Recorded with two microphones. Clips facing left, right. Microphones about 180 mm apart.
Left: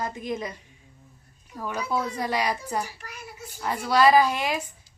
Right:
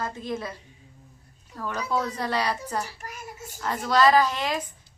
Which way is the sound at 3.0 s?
45° right (ahead or behind).